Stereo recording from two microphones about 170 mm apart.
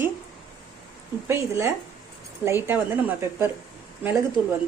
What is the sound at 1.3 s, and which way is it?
Speech, 15° right (ahead or behind).